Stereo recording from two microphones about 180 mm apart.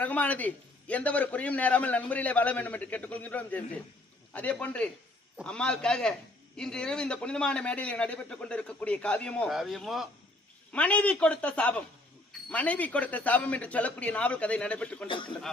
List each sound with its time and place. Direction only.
0.0 s a man's voice: 10° left (ahead or behind)
15.0 s a man's voice: 25° left (ahead or behind)